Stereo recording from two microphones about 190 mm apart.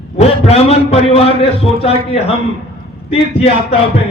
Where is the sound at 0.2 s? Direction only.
30° left (ahead or behind).